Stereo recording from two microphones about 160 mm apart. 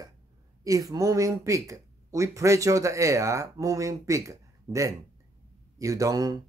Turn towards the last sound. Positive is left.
turn(degrees=-25)  # may be behind; listen again after turning